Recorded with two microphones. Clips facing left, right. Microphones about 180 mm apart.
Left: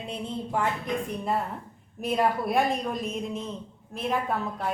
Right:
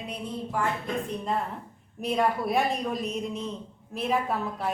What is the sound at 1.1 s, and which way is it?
A woman's voice, 5° left (ahead or behind).